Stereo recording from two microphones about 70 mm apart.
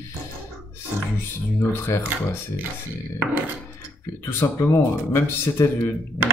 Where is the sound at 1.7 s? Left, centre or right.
Left.